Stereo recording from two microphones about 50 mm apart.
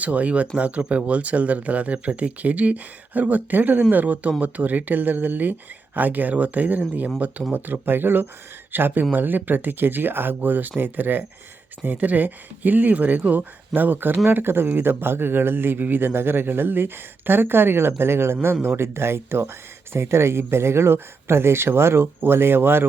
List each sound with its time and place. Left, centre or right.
0.0 s speech: right